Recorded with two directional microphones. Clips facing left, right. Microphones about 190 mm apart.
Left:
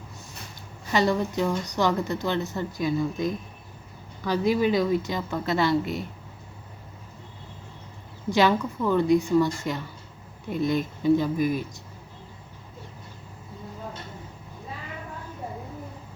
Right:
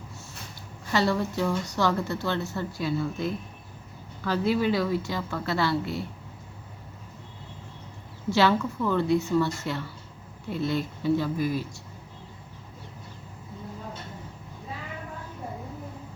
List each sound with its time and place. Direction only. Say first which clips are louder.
0.9 s a woman's voice: left 2 dB; 15° left (ahead or behind)
8.3 s a woman's voice: left 1 dB; 15° left (ahead or behind)